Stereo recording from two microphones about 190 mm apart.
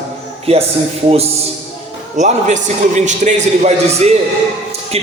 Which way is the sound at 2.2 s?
40° right (ahead or behind).